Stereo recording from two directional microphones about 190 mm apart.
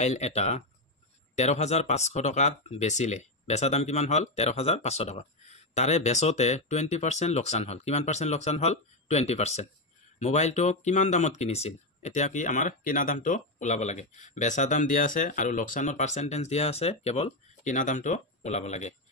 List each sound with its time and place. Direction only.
0.0 s speech: 35° left (ahead or behind)